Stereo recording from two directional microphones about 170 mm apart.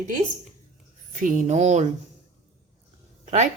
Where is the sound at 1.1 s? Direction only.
50° right (ahead or behind).